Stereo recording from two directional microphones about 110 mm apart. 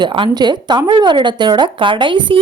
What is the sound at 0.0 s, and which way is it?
Speech, 45° right (ahead or behind).